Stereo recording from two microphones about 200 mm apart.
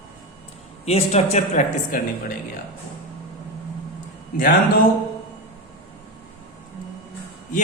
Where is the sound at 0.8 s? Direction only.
30° left (ahead or behind).